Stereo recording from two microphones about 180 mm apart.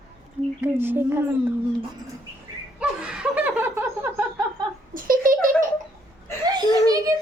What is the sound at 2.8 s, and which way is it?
Laughter, 5° right (ahead or behind).